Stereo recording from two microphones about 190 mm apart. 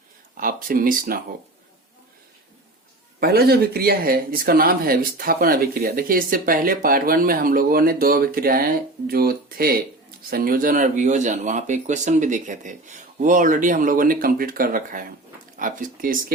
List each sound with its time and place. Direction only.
0.3 s speech: 45° right (ahead or behind)
3.2 s speech: 55° right (ahead or behind)